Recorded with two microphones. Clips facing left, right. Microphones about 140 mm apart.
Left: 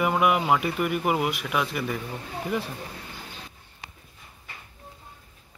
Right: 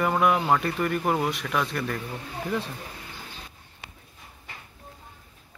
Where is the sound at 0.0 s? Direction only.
5° left (ahead or behind).